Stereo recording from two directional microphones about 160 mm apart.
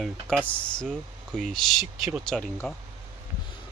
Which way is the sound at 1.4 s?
5° left (ahead or behind).